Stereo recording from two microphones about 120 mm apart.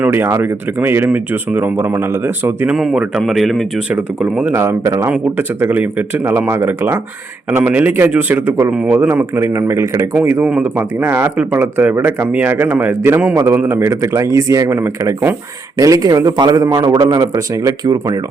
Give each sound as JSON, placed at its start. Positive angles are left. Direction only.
{"t": 0.0, "sound": "speech", "side_deg": -20}
{"t": 2.7, "sound": "speech", "side_deg": 0}
{"t": 4.5, "sound": "speech", "side_deg": -25}
{"t": 5.1, "sound": "a man's voice", "side_deg": -15}
{"t": 17.2, "sound": "speech", "side_deg": -25}